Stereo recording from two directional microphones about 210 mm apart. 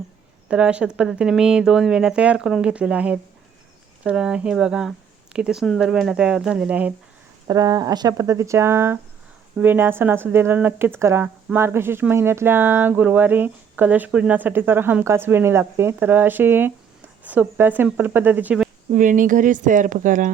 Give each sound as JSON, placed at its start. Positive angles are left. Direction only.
{"t": 0.4, "sound": "speech", "side_deg": -5}
{"t": 7.4, "sound": "speech", "side_deg": -20}
{"t": 18.9, "sound": "speech", "side_deg": -40}